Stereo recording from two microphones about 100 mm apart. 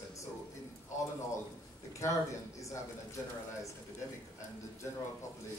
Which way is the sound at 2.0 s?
30° left (ahead or behind).